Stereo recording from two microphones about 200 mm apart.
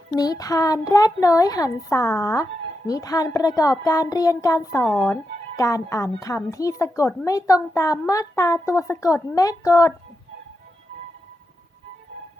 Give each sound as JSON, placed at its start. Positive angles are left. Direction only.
{"t": 0.2, "sound": "a child's voice", "side_deg": 20}